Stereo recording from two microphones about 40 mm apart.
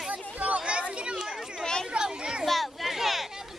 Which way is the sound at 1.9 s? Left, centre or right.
Right.